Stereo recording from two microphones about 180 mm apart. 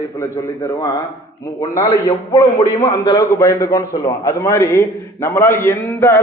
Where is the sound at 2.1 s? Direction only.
30° left (ahead or behind).